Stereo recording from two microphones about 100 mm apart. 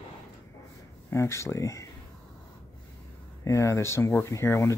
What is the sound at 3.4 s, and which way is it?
Speech, 30° left (ahead or behind).